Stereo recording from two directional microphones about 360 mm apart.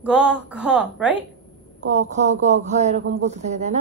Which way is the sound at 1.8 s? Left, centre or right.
Centre.